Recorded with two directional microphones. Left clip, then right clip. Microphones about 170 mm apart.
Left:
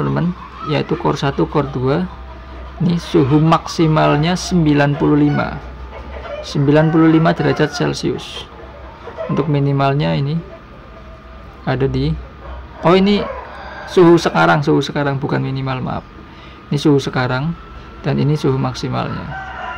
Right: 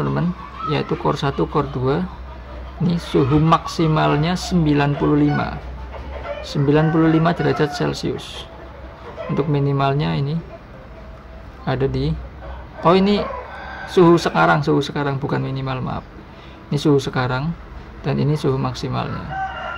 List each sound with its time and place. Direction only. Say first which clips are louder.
0.0 s speech: left 3 dB; 15° left (ahead or behind)
11.6 s speech: left 3 dB; 15° left (ahead or behind)